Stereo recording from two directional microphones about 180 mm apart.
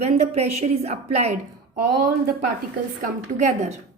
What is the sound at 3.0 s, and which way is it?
Speech, 40° right (ahead or behind).